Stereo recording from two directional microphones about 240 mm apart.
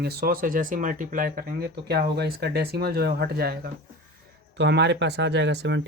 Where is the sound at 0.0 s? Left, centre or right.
Right.